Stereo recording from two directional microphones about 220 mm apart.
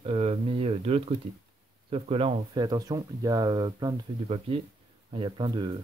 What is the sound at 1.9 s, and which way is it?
Speech, 25° right (ahead or behind).